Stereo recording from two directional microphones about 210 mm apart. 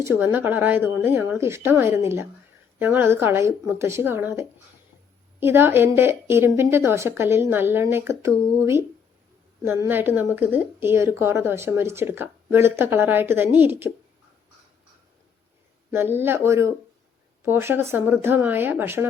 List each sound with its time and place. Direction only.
0.0 s a woman's voice: 10° right (ahead or behind)
15.9 s a woman's voice: 10° right (ahead or behind)